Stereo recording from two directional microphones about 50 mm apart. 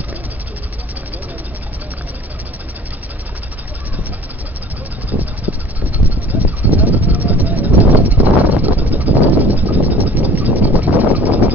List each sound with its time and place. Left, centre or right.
5.5 s vehicle: right